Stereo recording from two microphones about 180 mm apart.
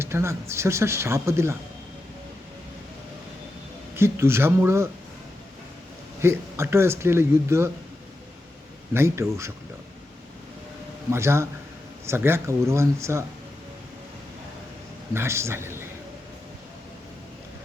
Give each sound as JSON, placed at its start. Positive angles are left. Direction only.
{"t": 0.0, "sound": "speech", "side_deg": -15}
{"t": 3.9, "sound": "speech", "side_deg": -15}
{"t": 6.2, "sound": "speech", "side_deg": -15}
{"t": 8.9, "sound": "speech", "side_deg": -15}
{"t": 11.1, "sound": "speech", "side_deg": -15}
{"t": 15.1, "sound": "a man's voice", "side_deg": -15}